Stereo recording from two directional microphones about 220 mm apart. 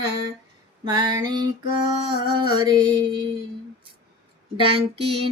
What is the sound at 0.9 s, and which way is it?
Female singing, 20° right (ahead or behind).